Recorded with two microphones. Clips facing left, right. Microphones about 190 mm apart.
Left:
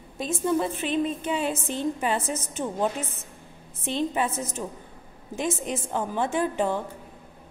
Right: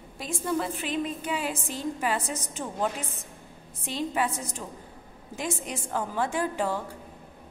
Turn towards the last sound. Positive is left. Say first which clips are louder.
# left 3 dB
turn(degrees=20)  # may be behind; listen again after turning